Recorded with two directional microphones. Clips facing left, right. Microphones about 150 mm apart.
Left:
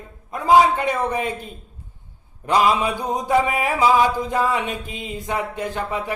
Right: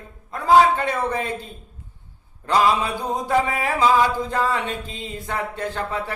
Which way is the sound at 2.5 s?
15° left (ahead or behind).